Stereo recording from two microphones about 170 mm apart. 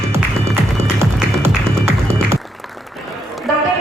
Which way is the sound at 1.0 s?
15° right (ahead or behind).